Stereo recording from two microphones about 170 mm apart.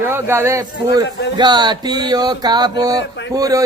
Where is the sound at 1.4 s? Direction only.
25° right (ahead or behind).